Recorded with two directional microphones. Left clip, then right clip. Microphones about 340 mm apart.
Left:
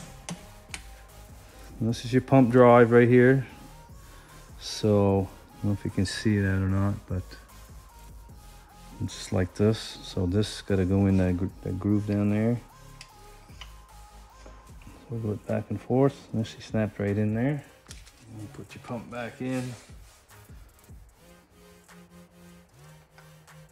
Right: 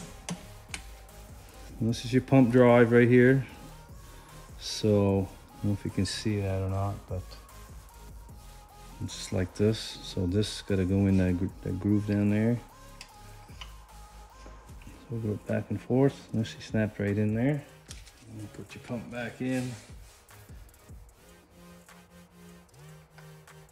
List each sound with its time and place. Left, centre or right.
0.0 s music: centre
1.7 s speech: centre
4.6 s speech: centre
6.3 s speech: left
9.0 s speech: centre
15.4 s speech: centre